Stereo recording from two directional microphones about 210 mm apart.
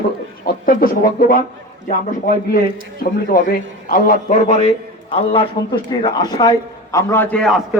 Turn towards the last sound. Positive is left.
turn(degrees=5)  # may be behind; listen again after turning